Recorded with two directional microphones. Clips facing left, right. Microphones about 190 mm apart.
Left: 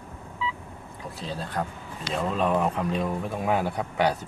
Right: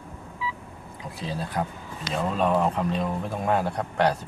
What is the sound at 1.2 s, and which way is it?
Speech, 10° right (ahead or behind).